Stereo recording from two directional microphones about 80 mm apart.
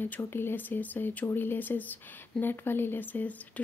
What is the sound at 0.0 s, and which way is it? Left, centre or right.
Speech, left.